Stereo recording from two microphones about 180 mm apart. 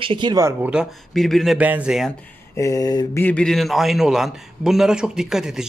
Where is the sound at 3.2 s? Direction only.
5° left (ahead or behind).